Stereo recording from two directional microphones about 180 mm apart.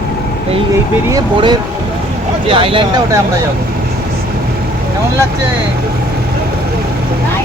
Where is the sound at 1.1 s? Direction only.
20° right (ahead or behind).